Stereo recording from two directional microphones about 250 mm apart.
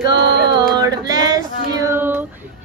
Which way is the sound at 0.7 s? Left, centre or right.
Centre.